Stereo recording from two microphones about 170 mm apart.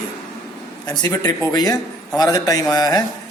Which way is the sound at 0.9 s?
25° left (ahead or behind).